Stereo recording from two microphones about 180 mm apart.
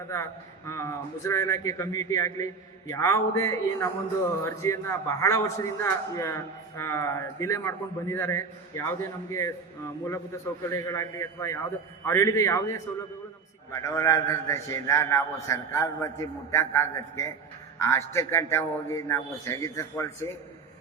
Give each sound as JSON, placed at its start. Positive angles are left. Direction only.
{"t": 0.1, "sound": "a man's voice", "side_deg": 15}
{"t": 10.7, "sound": "a man's voice", "side_deg": 15}